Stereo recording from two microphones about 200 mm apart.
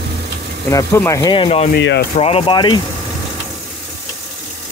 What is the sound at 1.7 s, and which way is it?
Speech, 60° left (ahead or behind).